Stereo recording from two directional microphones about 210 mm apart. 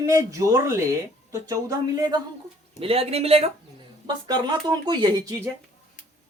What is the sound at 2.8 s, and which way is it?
Speech, 25° right (ahead or behind).